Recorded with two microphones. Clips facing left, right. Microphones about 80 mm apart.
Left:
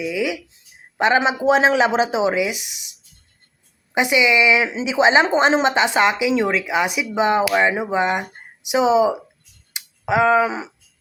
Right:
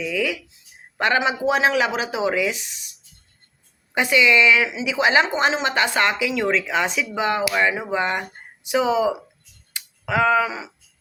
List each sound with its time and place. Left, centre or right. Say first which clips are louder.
0.0 s speech: left 2 dB; centre
3.9 s speech: left 1 dB; centre
4.7 s speech: left 3 dB; left
5.6 s speech: left 4 dB; left
9.7 s tick: left 3 dB; centre